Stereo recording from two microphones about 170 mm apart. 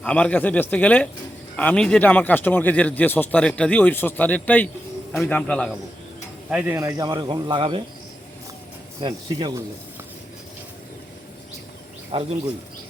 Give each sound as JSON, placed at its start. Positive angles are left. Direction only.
{"t": 0.0, "sound": "a man's voice", "side_deg": 5}
{"t": 6.5, "sound": "speech", "side_deg": -5}
{"t": 6.7, "sound": "speech", "side_deg": -20}
{"t": 9.0, "sound": "speech", "side_deg": -25}
{"t": 12.1, "sound": "speech", "side_deg": -30}